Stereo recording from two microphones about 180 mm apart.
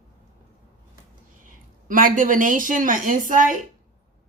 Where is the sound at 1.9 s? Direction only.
50° right (ahead or behind).